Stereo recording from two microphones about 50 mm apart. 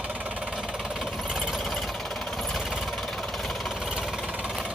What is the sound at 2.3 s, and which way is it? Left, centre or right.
Vehicle, centre.